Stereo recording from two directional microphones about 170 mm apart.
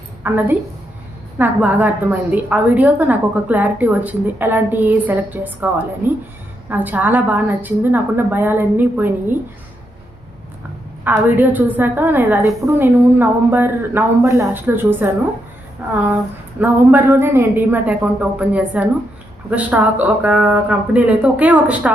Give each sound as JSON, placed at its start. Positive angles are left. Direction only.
{"t": 0.2, "sound": "a woman's voice", "side_deg": -10}
{"t": 11.0, "sound": "a woman's voice", "side_deg": -10}